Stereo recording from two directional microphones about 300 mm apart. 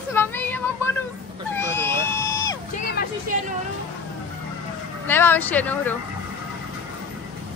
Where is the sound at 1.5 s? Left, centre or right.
Centre.